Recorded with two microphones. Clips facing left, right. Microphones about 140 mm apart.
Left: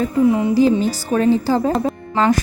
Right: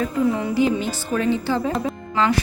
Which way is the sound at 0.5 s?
35° left (ahead or behind).